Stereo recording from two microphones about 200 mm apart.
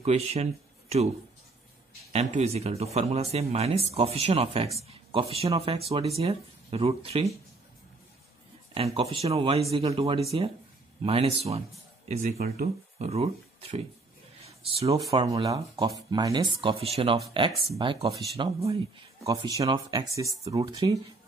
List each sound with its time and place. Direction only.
0.0 s speech: 30° right (ahead or behind)
2.1 s speech: 30° right (ahead or behind)
8.7 s speech: 30° right (ahead or behind)
12.1 s speech: 40° right (ahead or behind)
13.0 s speech: 30° right (ahead or behind)
14.4 s a sound: 30° right (ahead or behind)
15.0 s speech: 15° right (ahead or behind)
19.2 s speech: 15° right (ahead or behind)